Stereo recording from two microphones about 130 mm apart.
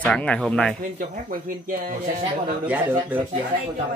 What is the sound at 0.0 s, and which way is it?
Speech, 10° left (ahead or behind).